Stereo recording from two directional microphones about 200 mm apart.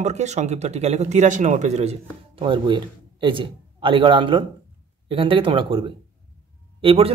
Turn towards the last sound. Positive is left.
turn(degrees=-30)  # may be behind; listen again after turning